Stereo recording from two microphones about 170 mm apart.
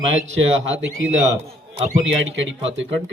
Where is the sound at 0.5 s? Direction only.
90° right.